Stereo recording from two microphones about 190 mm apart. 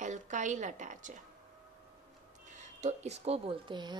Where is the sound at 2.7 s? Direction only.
35° right (ahead or behind).